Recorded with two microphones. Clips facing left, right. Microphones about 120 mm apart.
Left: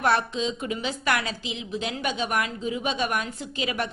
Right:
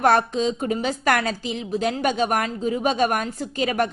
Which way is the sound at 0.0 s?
45° right (ahead or behind).